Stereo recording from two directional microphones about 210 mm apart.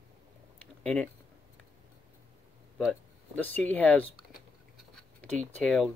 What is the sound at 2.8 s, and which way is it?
Speech, 5° left (ahead or behind).